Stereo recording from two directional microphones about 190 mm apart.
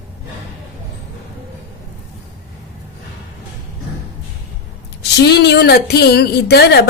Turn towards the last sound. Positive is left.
turn(degrees=60)  # may be behind; listen again after turning